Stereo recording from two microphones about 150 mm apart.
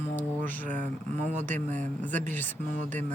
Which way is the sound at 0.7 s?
50° right (ahead or behind).